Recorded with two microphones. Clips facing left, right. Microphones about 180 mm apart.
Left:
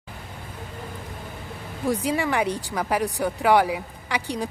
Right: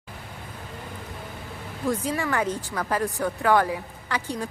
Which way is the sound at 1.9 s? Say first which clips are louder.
Left 2 dB; 15° left (ahead or behind).